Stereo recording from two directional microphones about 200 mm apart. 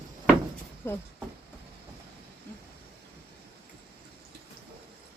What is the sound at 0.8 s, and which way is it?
Speech, 15° left (ahead or behind).